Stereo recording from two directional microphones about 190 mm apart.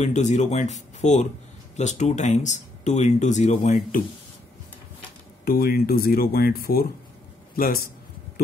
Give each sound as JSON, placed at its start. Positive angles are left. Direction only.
{"t": 0.0, "sound": "speech", "side_deg": 40}
{"t": 5.4, "sound": "speech", "side_deg": 50}